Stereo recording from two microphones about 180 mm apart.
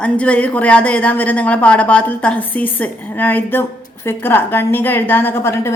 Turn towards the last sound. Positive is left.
turn(degrees=15)  # may be behind; listen again after turning